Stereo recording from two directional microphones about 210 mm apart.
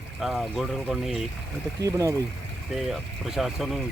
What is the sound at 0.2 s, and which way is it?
Speech, centre (ahead or behind).